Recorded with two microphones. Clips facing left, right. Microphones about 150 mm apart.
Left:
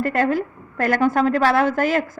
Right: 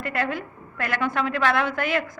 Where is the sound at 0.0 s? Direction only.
40° left (ahead or behind).